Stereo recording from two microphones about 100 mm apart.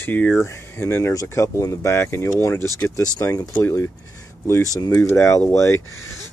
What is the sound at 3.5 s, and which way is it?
Speech, 20° left (ahead or behind).